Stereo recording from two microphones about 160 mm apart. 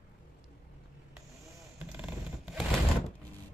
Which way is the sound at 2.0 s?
5° right (ahead or behind).